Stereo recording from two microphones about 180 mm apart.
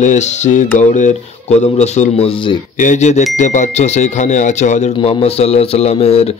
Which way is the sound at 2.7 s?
45° left (ahead or behind).